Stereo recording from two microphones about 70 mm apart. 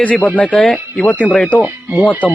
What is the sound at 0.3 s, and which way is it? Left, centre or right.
Speech, centre.